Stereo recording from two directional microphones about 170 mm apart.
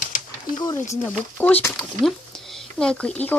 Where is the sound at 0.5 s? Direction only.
20° left (ahead or behind).